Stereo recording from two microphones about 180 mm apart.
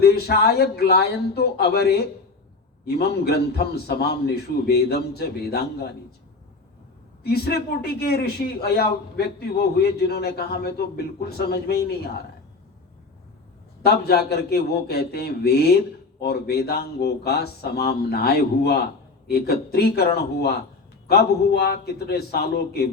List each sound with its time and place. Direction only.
0.0 s a man's voice: 60° left (ahead or behind)
7.2 s a man's voice: 60° left (ahead or behind)
13.8 s a man's voice: 65° left (ahead or behind)